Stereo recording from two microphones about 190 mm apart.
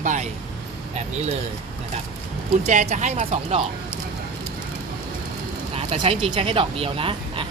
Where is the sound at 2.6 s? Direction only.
40° right (ahead or behind).